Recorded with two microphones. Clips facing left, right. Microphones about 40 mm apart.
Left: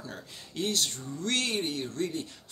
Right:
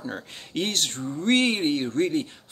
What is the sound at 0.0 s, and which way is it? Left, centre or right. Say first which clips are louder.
Speech: right 8 dB; right.